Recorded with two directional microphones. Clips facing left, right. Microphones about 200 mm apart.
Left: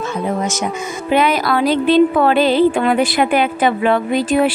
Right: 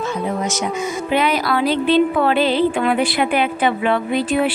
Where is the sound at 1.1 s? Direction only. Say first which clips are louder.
Left 4 dB; 45° left (ahead or behind).